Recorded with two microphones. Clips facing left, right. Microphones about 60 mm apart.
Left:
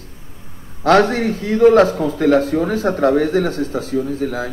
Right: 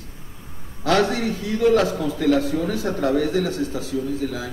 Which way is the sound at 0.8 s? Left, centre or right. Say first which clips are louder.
Left 6 dB; left.